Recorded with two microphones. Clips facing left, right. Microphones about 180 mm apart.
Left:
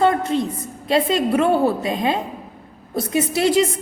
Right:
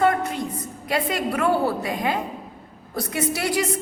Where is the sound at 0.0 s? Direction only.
25° left (ahead or behind).